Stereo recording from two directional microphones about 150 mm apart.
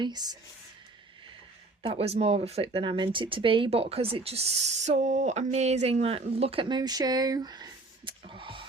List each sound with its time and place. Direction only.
0.0 s speech: 25° right (ahead or behind)
1.8 s speech: 40° right (ahead or behind)